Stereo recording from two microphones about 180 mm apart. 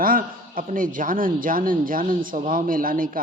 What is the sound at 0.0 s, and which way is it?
A man's voice, 50° right (ahead or behind).